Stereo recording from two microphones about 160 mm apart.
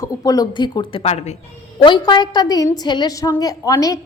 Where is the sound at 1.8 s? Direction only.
30° left (ahead or behind).